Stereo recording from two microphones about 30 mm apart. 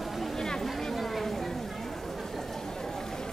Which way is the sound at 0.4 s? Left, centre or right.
Centre.